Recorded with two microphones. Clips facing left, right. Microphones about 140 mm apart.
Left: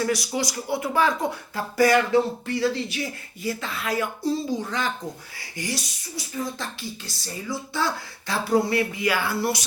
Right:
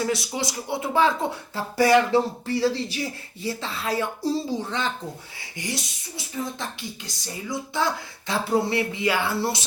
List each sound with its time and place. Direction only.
0.0 s speech: 25° right (ahead or behind)
5.5 s speech: 20° right (ahead or behind)